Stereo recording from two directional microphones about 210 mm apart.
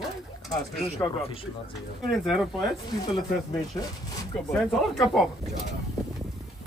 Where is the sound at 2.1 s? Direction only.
Centre (ahead or behind).